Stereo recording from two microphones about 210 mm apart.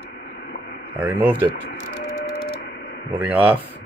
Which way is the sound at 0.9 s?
10° right (ahead or behind).